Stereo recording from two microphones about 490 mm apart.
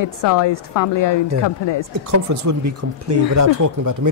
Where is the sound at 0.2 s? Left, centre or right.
Left.